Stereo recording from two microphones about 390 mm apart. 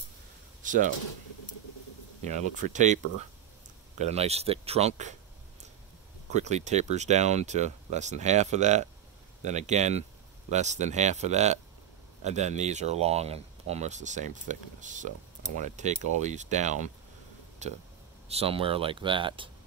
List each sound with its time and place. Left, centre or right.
0.6 s speech: centre
2.2 s speech: centre
4.0 s speech: centre
6.3 s speech: centre